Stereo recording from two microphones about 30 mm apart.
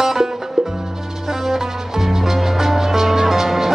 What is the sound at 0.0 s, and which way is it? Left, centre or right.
Music, centre.